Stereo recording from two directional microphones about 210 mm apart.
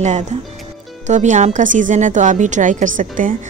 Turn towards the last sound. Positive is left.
turn(degrees=-40)  # may be behind; listen again after turning